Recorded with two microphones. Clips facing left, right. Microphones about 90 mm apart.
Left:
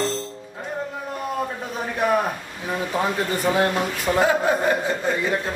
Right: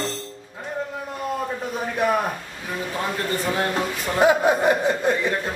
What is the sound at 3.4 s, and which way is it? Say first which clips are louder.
Speech: left 5 dB; 15° left (ahead or behind).